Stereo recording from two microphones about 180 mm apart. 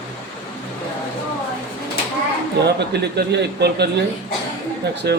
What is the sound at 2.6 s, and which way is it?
Speech, 70° right (ahead or behind).